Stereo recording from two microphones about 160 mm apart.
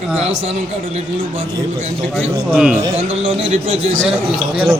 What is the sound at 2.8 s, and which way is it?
Speech, 40° right (ahead or behind).